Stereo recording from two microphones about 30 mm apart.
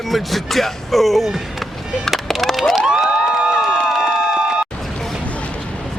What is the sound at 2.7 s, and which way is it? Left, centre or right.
Cheering, centre.